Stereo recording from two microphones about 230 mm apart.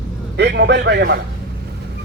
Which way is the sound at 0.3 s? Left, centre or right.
Right.